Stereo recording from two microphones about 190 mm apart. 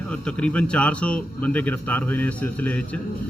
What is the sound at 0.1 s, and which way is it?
A man's voice, 5° left (ahead or behind).